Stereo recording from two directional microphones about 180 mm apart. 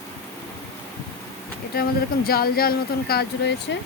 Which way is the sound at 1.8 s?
55° left (ahead or behind).